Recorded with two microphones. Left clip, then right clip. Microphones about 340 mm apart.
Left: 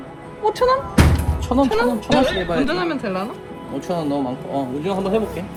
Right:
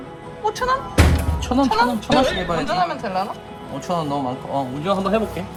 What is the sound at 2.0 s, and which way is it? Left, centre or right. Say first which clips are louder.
Speech: even; centre.